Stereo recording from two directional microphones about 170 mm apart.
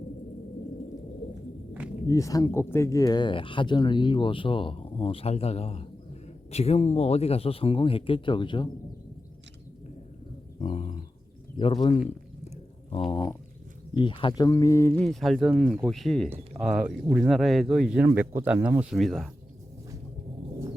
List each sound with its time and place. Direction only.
2.0 s speech: 20° left (ahead or behind)
10.6 s a sound: 40° left (ahead or behind)
11.5 s speech: 25° left (ahead or behind)
11.9 s a sound: 40° left (ahead or behind)
13.9 s speech: 30° left (ahead or behind)
14.9 s speech: centre (ahead or behind)